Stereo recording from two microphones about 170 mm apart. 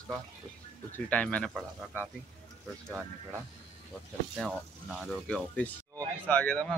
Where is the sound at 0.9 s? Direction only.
10° left (ahead or behind).